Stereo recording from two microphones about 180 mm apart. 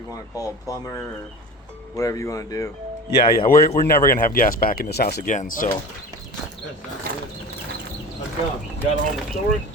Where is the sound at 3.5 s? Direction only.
50° left (ahead or behind).